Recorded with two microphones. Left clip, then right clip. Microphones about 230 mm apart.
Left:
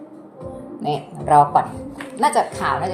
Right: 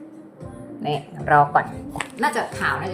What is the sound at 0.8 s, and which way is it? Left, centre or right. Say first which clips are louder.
Speech: left 2 dB; left.